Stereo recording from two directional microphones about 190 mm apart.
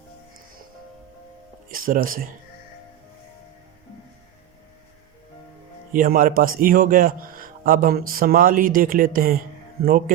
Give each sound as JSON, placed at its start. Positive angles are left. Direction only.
{"t": 1.7, "sound": "speech", "side_deg": -50}
{"t": 5.9, "sound": "a man's voice", "side_deg": -45}